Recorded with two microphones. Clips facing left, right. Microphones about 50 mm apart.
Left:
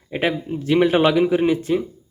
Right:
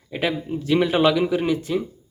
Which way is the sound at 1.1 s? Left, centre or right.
Left.